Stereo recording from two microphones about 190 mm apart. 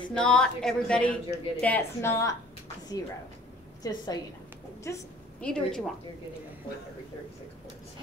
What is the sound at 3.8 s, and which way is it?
A woman's voice, 20° left (ahead or behind).